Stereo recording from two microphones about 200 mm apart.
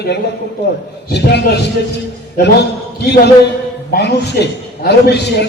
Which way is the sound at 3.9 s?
55° left (ahead or behind).